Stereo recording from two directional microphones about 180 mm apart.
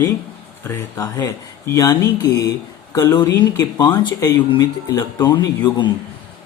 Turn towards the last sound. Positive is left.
turn(degrees=25)  # may be behind; listen again after turning